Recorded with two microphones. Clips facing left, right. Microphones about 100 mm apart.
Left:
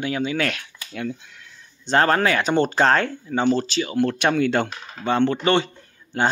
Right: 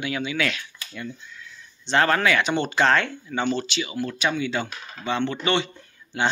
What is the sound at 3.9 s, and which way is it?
Speech, 60° left (ahead or behind).